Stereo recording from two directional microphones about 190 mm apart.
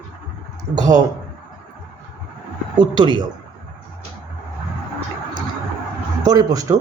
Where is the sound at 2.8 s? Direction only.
25° right (ahead or behind).